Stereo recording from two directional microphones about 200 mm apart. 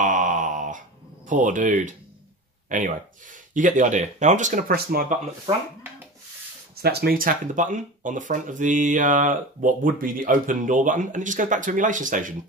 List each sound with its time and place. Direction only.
0.0 s a sound: 40° right (ahead or behind)
2.7 s speech: 40° right (ahead or behind)
6.7 s speech: 50° right (ahead or behind)